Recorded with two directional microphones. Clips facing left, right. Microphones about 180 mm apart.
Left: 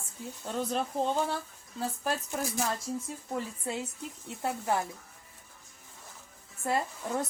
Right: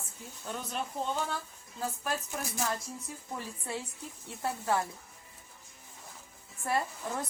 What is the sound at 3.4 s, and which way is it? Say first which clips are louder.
Speech: left 5 dB; 20° left (ahead or behind).